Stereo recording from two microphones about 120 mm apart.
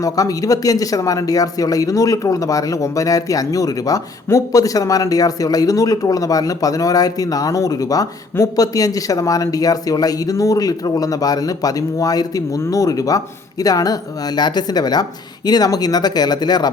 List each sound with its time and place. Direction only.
0.0 s speech: 30° left (ahead or behind)